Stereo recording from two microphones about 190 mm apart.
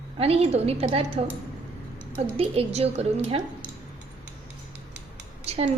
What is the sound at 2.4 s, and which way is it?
A woman's voice, 30° right (ahead or behind).